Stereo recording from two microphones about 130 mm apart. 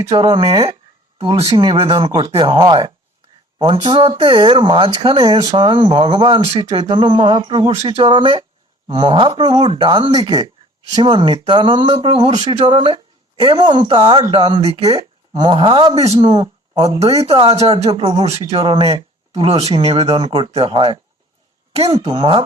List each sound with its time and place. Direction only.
0.1 s speech: 35° right (ahead or behind)
17.0 s speech: 50° right (ahead or behind)
18.5 s speech: 35° right (ahead or behind)
19.4 s speech: 50° right (ahead or behind)
20.1 s speech: 40° right (ahead or behind)